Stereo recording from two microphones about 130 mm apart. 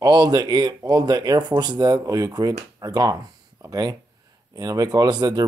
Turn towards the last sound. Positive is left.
turn(degrees=-30)  # may be behind; listen again after turning